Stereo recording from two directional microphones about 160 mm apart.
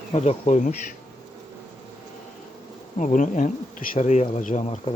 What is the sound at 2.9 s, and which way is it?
Speech, 55° left (ahead or behind).